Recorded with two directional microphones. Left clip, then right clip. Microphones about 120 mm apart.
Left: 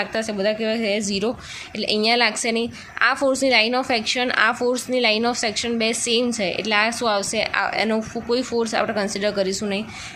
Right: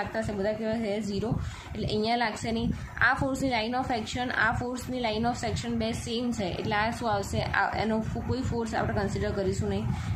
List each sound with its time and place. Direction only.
0.0 s a woman's voice: 35° left (ahead or behind)